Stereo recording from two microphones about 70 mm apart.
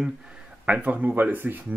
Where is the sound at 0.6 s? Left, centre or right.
Centre.